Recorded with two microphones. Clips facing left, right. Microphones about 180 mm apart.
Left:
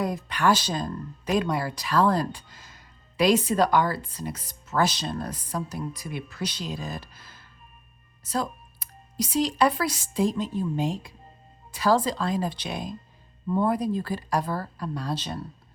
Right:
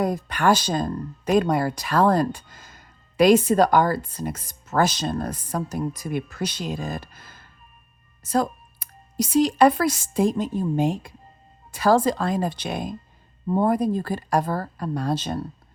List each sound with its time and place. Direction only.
0.0 s speech: 45° right (ahead or behind)